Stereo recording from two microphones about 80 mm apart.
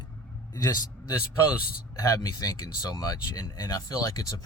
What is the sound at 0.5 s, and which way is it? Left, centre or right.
A man's voice, left.